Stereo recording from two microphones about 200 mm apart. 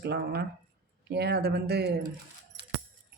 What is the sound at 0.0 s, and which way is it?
Speech, 55° right (ahead or behind).